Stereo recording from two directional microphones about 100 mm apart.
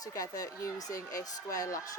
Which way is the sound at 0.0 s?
35° left (ahead or behind).